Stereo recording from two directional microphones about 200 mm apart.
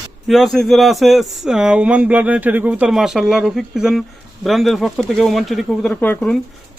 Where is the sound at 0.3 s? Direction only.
Centre (ahead or behind).